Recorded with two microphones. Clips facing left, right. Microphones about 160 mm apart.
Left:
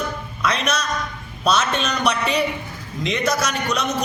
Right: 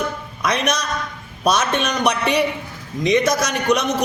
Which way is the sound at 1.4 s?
15° right (ahead or behind).